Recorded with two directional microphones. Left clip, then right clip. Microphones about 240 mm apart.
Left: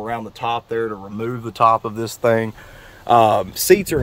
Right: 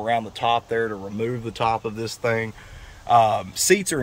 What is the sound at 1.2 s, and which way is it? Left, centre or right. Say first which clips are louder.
Speech: left 8 dB; centre.